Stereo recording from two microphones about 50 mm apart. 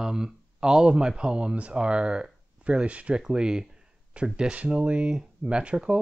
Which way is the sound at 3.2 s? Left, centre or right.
Centre.